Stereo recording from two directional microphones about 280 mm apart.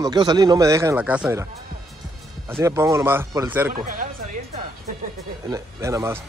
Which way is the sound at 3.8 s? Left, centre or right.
Right.